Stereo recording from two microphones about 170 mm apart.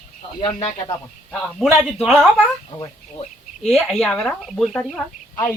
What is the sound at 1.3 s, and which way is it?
Speech, centre (ahead or behind).